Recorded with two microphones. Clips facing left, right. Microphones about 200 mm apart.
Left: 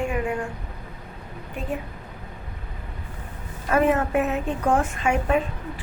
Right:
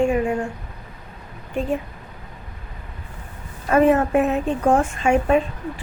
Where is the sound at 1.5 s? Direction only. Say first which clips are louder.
Right 9 dB; 25° right (ahead or behind).